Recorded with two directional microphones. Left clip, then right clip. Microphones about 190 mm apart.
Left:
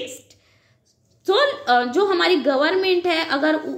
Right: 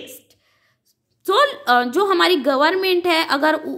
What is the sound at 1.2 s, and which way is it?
A woman's voice, 35° right (ahead or behind).